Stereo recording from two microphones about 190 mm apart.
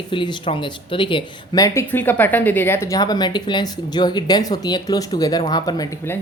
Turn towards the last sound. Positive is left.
turn(degrees=15)  # may be behind; listen again after turning